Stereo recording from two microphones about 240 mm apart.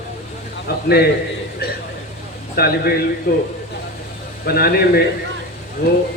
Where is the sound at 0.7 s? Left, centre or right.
Left.